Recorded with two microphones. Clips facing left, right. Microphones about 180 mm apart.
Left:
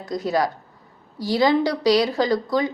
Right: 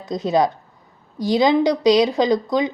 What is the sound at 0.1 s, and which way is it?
A woman's voice, 20° right (ahead or behind).